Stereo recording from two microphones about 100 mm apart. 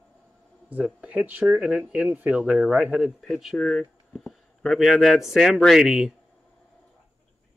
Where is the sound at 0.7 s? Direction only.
15° right (ahead or behind).